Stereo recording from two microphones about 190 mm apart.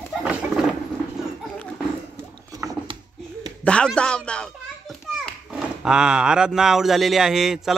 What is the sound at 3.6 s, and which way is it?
A child's voice, 5° left (ahead or behind).